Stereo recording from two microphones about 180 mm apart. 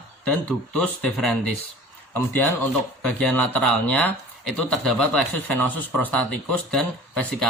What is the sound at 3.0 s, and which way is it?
Speech, 5° left (ahead or behind).